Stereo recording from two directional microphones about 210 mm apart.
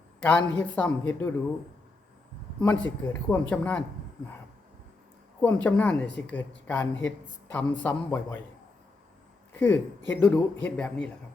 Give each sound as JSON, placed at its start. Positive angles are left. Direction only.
{"t": 0.2, "sound": "a woman's voice", "side_deg": 5}
{"t": 2.6, "sound": "a woman's voice", "side_deg": 10}
{"t": 5.4, "sound": "a woman's voice", "side_deg": 10}
{"t": 9.6, "sound": "a woman's voice", "side_deg": 10}